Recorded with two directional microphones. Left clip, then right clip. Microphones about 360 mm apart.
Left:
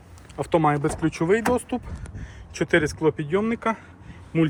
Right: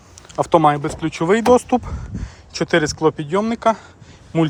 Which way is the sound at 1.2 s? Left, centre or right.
Centre.